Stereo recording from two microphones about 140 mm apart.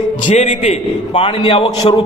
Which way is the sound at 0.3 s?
55° left (ahead or behind).